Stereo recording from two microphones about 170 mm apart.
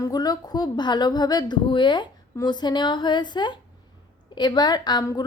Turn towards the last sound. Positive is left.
turn(degrees=25)  # may be behind; listen again after turning